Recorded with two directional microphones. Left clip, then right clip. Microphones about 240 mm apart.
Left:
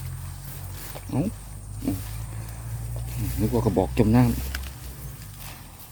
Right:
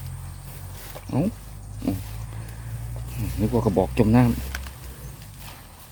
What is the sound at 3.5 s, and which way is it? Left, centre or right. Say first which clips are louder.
Speech: right 2 dB; centre.